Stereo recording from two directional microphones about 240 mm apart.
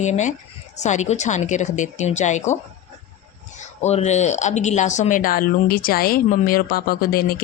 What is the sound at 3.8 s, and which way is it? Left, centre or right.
Speech, left.